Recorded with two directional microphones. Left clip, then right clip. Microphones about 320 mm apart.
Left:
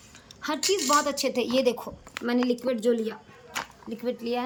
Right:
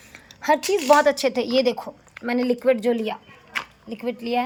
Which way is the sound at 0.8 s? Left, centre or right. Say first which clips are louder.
Right 10 dB; left.